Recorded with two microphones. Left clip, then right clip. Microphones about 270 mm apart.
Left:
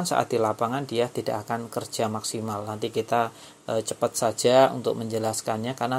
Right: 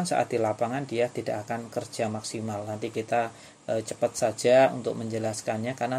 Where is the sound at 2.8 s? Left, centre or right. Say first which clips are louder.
Left 3 dB; centre.